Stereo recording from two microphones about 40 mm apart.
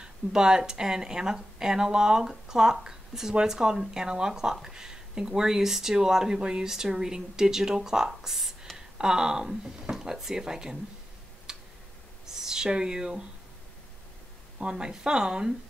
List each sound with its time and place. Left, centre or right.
0.0 s speech: centre
11.5 s tick: centre
12.4 s speech: centre
14.6 s speech: right